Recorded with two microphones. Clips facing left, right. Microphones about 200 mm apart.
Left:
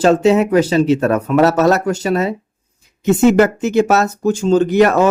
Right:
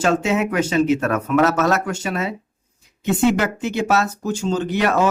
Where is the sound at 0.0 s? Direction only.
35° left (ahead or behind).